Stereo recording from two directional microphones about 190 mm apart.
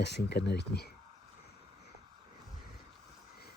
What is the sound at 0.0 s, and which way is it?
Speech, 60° left (ahead or behind).